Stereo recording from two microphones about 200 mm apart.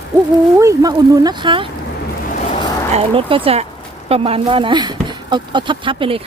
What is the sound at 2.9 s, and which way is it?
Speech, 25° right (ahead or behind).